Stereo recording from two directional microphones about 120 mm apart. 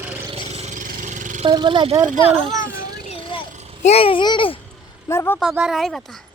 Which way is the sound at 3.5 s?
65° right (ahead or behind).